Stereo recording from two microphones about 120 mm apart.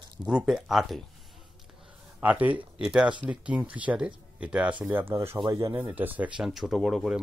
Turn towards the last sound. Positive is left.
turn(degrees=-5)  # may be behind; listen again after turning